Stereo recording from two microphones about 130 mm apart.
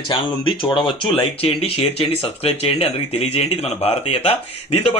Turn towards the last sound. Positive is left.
turn(degrees=50)  # may be behind; listen again after turning